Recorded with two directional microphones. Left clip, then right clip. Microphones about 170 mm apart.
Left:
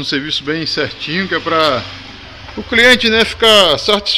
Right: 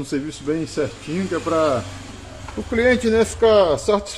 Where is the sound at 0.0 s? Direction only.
10° left (ahead or behind).